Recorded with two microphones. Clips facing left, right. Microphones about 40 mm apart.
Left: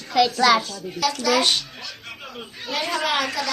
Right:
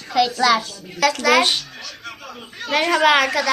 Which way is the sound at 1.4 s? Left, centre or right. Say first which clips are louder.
Right 3 dB; centre.